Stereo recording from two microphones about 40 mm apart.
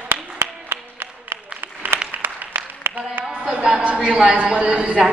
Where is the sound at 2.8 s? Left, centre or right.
Right.